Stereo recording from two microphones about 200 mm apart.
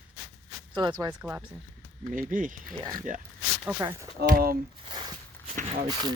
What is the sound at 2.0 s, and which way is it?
Speech, 40° right (ahead or behind).